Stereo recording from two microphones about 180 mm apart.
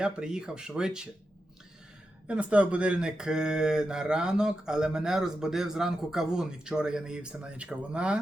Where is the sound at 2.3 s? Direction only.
5° right (ahead or behind).